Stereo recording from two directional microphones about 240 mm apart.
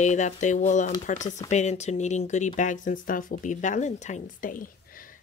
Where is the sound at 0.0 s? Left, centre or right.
Left.